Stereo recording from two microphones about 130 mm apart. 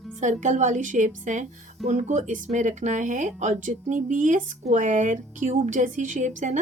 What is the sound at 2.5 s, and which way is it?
Speech, 65° right (ahead or behind).